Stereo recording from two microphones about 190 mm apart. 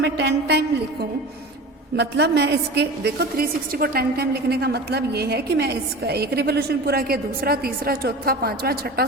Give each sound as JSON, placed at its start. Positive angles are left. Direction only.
{"t": 0.0, "sound": "a woman's voice", "side_deg": -65}
{"t": 2.0, "sound": "a woman's voice", "side_deg": -60}